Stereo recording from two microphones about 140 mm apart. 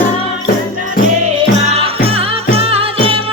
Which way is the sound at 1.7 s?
45° right (ahead or behind).